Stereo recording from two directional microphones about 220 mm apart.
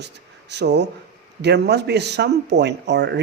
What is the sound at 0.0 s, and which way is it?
A man's voice, 50° right (ahead or behind).